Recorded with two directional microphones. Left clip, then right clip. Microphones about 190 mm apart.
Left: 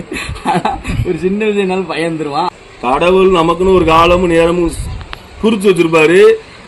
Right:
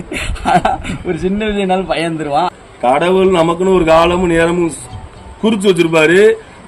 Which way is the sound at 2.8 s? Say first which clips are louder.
Left 1 dB; 5° right (ahead or behind).